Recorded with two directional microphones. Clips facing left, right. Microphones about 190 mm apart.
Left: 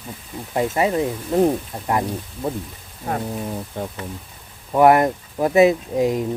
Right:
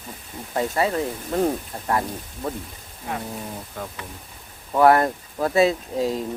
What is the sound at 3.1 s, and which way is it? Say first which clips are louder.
Speech: left 5 dB; 45° left (ahead or behind).